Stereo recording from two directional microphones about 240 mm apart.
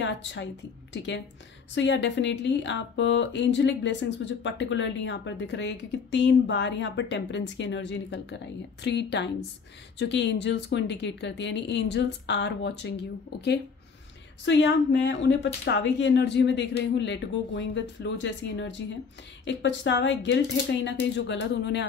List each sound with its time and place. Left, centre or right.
0.0 s a woman's voice: left